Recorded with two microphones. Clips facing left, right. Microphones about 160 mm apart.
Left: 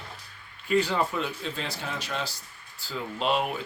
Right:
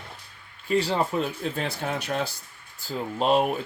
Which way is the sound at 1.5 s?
55° right (ahead or behind).